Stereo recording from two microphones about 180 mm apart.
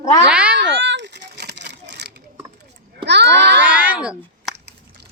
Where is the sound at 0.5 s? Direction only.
75° right (ahead or behind).